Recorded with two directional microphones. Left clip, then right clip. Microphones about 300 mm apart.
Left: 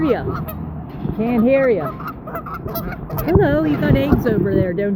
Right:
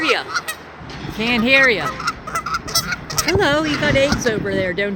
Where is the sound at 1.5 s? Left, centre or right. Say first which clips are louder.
Right 2 dB; right.